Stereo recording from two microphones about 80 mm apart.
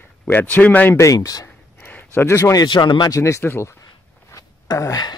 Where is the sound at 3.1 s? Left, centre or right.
Left.